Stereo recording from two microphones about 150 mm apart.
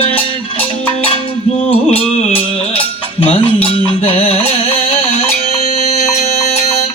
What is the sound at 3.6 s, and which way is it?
Music, 40° left (ahead or behind).